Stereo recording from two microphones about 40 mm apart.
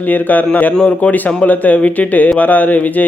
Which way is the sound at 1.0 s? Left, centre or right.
Left.